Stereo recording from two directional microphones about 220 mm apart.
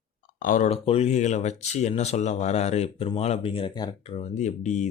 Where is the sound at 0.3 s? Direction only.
35° left (ahead or behind).